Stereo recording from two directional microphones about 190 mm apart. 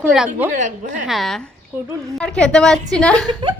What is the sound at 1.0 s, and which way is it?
Speech, centre (ahead or behind).